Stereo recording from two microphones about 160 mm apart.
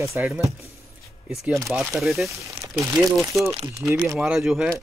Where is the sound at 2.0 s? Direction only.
Centre (ahead or behind).